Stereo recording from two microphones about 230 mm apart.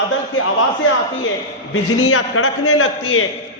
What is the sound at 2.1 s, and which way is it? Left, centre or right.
A man's voice, left.